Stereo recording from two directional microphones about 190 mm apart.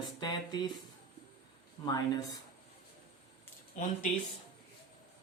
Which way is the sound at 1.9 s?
20° left (ahead or behind).